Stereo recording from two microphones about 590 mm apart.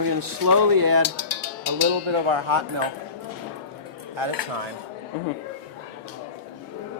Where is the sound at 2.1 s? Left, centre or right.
Right.